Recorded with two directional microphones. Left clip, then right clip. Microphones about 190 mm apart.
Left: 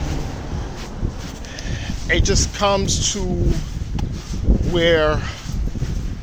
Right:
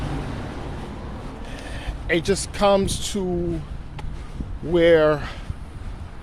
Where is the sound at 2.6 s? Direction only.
40° right (ahead or behind).